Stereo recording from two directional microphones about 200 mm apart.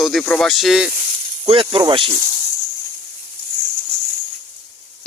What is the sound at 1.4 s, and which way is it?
Speech, 25° right (ahead or behind).